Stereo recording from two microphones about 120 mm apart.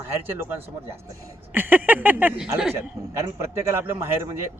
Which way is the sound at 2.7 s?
20° right (ahead or behind).